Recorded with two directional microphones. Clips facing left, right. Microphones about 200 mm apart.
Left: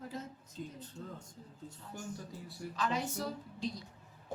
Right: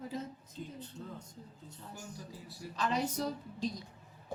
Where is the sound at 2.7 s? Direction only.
35° right (ahead or behind).